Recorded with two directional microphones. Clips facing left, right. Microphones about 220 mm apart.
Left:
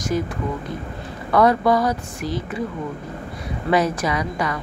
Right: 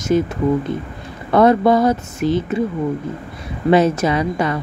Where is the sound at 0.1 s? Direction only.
25° right (ahead or behind).